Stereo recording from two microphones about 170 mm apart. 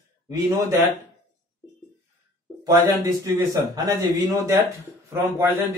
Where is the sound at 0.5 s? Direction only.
20° right (ahead or behind).